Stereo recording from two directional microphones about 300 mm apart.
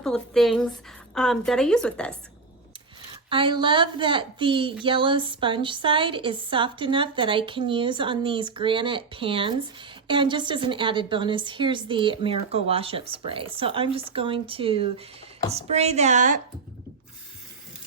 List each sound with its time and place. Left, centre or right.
0.0 s a woman's voice: centre
3.2 s a woman's voice: centre